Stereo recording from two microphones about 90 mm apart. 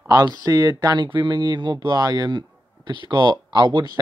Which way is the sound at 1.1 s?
55° right (ahead or behind).